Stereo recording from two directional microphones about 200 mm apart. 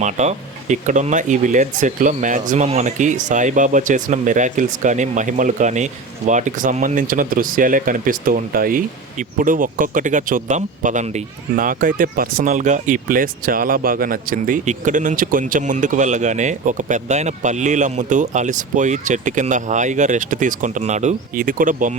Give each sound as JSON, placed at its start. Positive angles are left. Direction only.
{"t": 0.0, "sound": "speech", "side_deg": -35}